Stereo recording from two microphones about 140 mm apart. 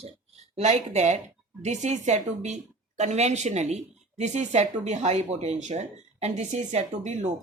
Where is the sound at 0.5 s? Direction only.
55° right (ahead or behind).